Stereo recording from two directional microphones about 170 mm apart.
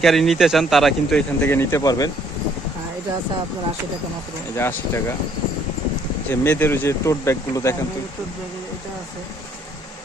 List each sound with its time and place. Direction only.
0.0 s speech: centre (ahead or behind); by 2.0 s 20° left (ahead or behind)
4.5 s speech: 15° left (ahead or behind)
6.4 s speech: 15° left (ahead or behind)